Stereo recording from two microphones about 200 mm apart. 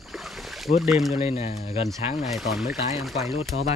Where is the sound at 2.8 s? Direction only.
35° left (ahead or behind).